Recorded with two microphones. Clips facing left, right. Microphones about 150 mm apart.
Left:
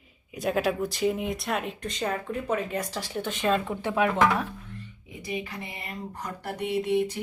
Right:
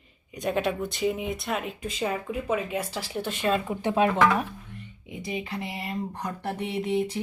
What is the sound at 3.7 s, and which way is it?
Speech, 20° right (ahead or behind).